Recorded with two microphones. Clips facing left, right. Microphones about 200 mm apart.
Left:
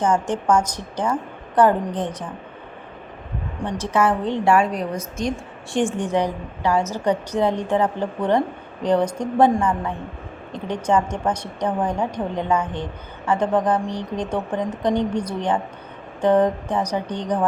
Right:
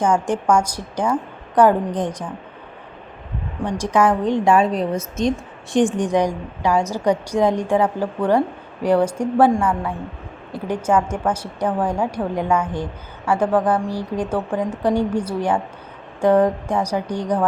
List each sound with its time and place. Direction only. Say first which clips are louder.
0.0 s a woman's voice: right 2 dB; 10° right (ahead or behind)
3.7 s a woman's voice: right 3 dB; 15° right (ahead or behind)